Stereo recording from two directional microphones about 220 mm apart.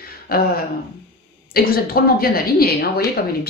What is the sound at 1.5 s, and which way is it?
Speech, 45° left (ahead or behind).